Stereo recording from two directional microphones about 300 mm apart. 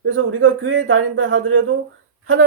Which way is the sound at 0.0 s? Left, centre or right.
Right.